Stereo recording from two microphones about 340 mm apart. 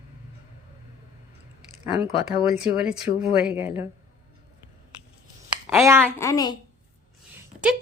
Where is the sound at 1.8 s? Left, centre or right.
Centre.